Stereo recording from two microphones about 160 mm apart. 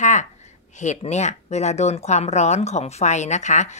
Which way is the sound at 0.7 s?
45° left (ahead or behind).